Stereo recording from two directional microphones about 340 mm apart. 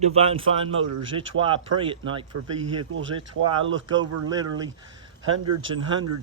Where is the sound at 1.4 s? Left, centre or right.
Centre.